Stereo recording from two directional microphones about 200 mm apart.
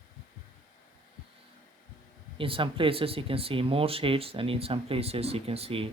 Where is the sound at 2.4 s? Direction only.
25° right (ahead or behind).